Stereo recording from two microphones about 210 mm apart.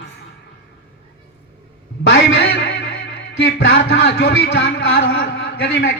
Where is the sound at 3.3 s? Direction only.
65° left (ahead or behind).